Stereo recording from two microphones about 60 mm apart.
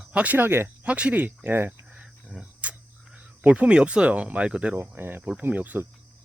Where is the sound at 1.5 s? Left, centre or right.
Right.